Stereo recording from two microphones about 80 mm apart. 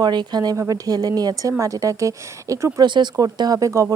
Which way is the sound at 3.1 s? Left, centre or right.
Right.